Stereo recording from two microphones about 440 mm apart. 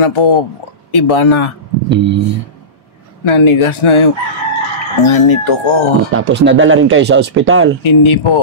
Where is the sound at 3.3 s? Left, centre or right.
Left.